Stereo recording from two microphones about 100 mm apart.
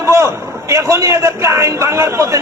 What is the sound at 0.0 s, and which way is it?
A man's voice, 30° right (ahead or behind).